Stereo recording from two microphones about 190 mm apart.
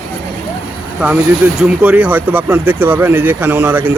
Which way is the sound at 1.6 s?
5° right (ahead or behind).